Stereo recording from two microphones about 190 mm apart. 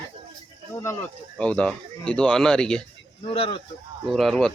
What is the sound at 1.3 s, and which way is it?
A man's voice, 5° left (ahead or behind).